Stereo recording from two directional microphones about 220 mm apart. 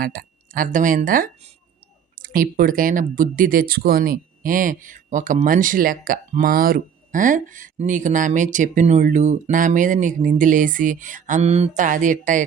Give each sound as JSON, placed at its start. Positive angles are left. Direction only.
{"t": 0.0, "sound": "speech", "side_deg": -40}